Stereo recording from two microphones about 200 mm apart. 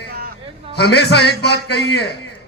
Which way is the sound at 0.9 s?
55° left (ahead or behind).